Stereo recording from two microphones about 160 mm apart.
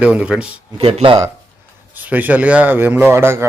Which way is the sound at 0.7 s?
35° right (ahead or behind).